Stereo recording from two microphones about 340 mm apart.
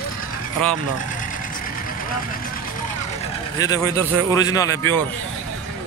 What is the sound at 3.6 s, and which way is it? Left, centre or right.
A man's voice, centre.